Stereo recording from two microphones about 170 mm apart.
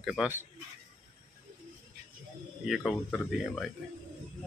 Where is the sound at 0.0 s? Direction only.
Centre (ahead or behind).